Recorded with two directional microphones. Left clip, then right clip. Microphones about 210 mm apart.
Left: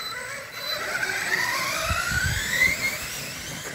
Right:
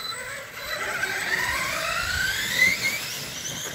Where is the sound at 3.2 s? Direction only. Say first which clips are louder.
Right 1 dB; centre (ahead or behind).